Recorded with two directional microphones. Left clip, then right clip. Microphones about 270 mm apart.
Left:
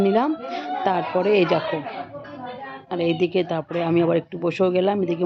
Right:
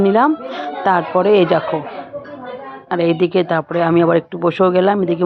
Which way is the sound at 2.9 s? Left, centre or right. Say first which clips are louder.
Right 7 dB; centre.